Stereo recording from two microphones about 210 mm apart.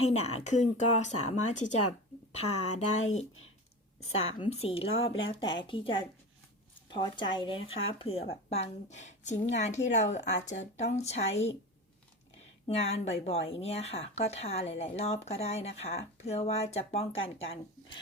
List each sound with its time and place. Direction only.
0.1 s a woman's voice: 30° left (ahead or behind)
4.4 s speech: 25° left (ahead or behind)
4.9 s speech: 70° left (ahead or behind)
5.6 s speech: 25° left (ahead or behind)
12.6 s speech: 30° left (ahead or behind)